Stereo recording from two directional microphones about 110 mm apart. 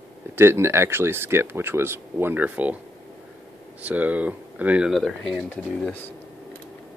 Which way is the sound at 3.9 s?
15° right (ahead or behind).